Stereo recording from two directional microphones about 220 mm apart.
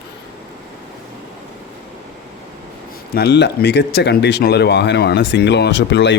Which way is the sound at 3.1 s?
50° left (ahead or behind).